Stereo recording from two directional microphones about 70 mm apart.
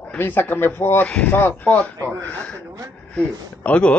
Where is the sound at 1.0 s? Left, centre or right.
Centre.